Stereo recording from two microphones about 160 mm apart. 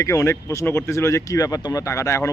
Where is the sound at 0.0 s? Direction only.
20° left (ahead or behind).